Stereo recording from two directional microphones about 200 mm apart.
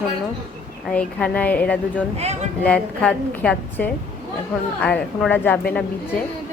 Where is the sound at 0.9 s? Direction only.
5° left (ahead or behind).